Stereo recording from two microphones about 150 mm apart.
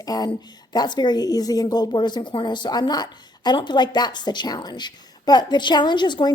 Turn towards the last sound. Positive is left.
turn(degrees=30)  # may be behind; listen again after turning